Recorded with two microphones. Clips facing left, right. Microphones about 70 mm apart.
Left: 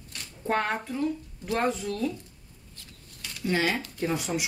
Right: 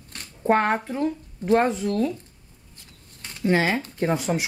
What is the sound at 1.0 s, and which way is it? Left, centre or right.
Speech, right.